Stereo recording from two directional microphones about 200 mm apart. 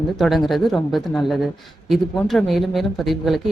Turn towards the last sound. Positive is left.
turn(degrees=0)  # may be behind; listen again after turning